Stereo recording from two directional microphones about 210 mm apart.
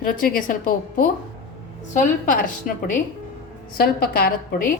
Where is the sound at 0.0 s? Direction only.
40° left (ahead or behind).